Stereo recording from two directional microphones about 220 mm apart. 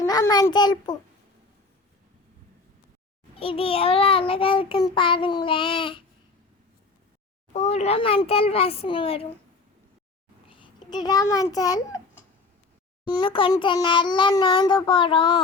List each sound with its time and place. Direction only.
0.0 s a child's voice: 15° left (ahead or behind)
3.3 s child singing: 25° left (ahead or behind)
7.5 s child singing: 30° left (ahead or behind)
10.5 s a child's voice: 20° left (ahead or behind)
13.1 s child singing: 20° left (ahead or behind)